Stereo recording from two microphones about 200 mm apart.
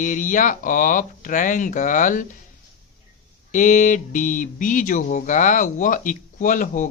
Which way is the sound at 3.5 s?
40° left (ahead or behind).